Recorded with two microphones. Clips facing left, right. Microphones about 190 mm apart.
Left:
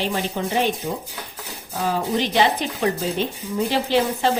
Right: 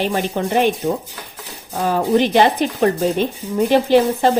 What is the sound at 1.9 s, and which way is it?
Speech, 50° right (ahead or behind).